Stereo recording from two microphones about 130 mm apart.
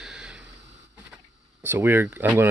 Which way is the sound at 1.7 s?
15° right (ahead or behind).